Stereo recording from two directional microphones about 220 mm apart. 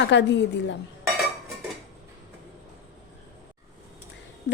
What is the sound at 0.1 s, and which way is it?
Speech, 55° left (ahead or behind).